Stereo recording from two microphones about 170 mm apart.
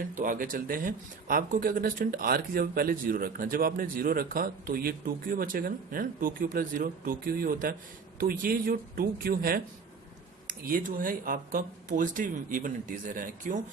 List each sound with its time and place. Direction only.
0.1 s speech: 55° right (ahead or behind)